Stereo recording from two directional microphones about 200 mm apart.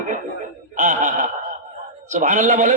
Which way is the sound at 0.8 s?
40° right (ahead or behind).